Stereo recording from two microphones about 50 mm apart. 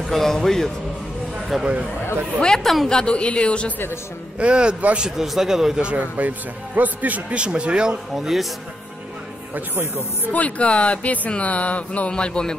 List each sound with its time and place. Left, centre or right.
0.0 s speech: centre
1.6 s a man's voice: right
2.4 s a woman's voice: centre
2.9 s speech: centre
4.4 s a man's voice: right
5.1 s a man's voice: centre
5.8 s a man's voice: right
7.3 s a man's voice: right
8.2 s a man's voice: centre
10.2 s speech: left
12.1 s speech: centre